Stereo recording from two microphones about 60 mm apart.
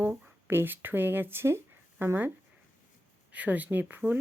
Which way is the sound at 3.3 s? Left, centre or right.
Right.